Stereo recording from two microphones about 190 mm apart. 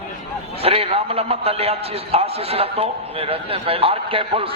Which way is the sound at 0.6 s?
30° right (ahead or behind).